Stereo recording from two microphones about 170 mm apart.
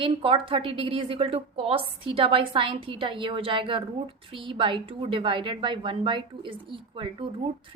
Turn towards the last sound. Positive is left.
turn(degrees=-30)  # may be behind; listen again after turning